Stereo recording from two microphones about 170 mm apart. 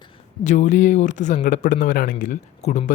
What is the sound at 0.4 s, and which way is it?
A man's voice, 45° left (ahead or behind).